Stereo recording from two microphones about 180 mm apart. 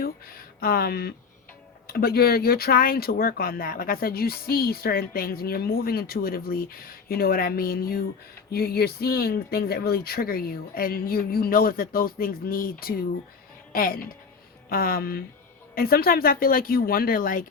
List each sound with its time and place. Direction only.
0.0 s speech: 55° left (ahead or behind)